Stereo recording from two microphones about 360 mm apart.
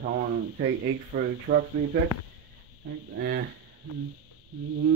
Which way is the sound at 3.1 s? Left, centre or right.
Right.